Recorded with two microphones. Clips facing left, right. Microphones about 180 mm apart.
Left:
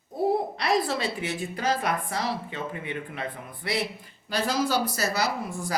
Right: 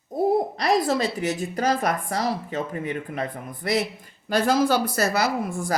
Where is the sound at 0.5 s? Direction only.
40° right (ahead or behind).